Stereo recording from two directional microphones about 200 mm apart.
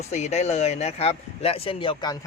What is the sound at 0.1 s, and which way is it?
Speech, 35° left (ahead or behind).